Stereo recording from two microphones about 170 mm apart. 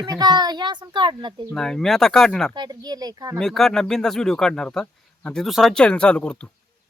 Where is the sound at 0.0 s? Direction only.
25° right (ahead or behind).